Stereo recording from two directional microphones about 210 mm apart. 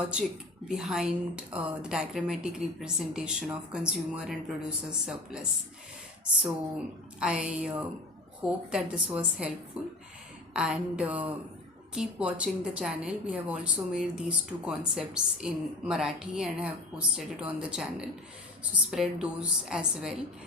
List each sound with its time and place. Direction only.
0.7 s a woman's voice: centre (ahead or behind)
7.2 s a woman's voice: 5° right (ahead or behind)
10.5 s a woman's voice: 5° right (ahead or behind)